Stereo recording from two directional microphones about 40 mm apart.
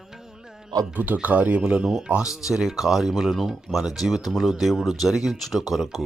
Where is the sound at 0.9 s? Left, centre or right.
Right.